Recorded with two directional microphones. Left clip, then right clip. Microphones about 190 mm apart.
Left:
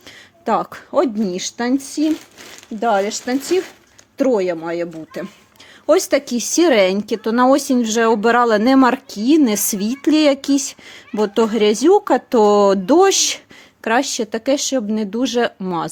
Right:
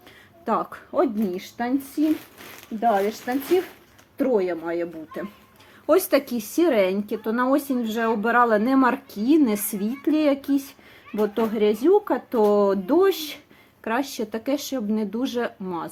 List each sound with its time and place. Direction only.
0.4 s speech: 45° left (ahead or behind)
5.8 s speech: 40° left (ahead or behind); by 13.4 s 60° left (ahead or behind)
13.8 s speech: 45° left (ahead or behind)